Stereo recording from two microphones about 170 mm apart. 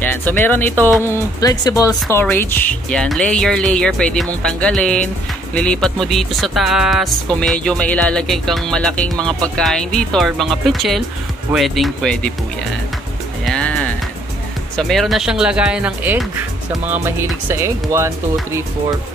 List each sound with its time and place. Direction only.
0.0 s speech: 10° left (ahead or behind)
13.5 s music: 5° left (ahead or behind)
14.8 s speech: centre (ahead or behind); by 18.9 s 15° right (ahead or behind)